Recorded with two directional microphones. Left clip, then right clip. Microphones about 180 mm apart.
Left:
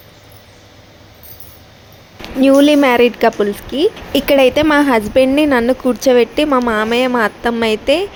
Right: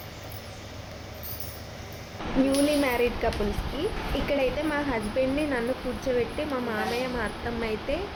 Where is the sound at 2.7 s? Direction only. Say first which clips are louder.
Left 14 dB; 60° left (ahead or behind).